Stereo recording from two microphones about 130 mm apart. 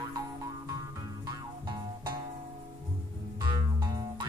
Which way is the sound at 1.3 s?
35° right (ahead or behind).